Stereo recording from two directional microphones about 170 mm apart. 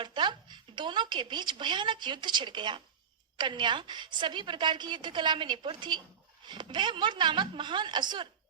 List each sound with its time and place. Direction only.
0.0 s a woman's voice: 25° right (ahead or behind)